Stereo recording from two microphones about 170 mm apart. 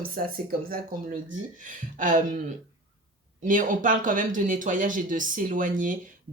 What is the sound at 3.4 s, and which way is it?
Speech, 50° right (ahead or behind).